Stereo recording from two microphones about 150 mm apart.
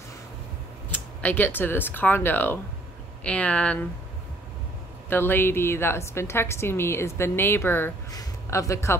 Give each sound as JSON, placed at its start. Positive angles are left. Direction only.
{"t": 0.8, "sound": "a woman's voice", "side_deg": 10}
{"t": 5.1, "sound": "a woman's voice", "side_deg": 15}